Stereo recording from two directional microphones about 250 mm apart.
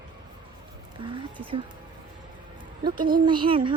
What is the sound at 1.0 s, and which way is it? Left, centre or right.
Speech, centre.